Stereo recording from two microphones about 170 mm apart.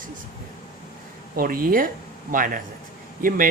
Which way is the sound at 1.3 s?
60° right (ahead or behind).